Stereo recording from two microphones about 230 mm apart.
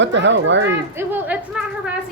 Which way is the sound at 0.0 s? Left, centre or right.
Right.